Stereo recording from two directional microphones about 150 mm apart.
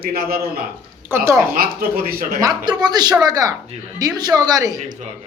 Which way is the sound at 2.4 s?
25° right (ahead or behind).